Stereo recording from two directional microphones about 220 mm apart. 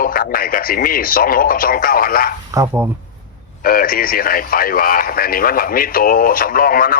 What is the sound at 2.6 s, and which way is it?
Speech, 10° right (ahead or behind).